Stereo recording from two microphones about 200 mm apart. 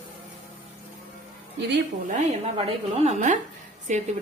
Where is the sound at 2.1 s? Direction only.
30° right (ahead or behind).